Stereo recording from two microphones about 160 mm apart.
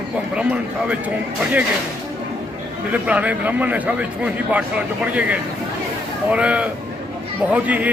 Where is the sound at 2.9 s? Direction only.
10° right (ahead or behind).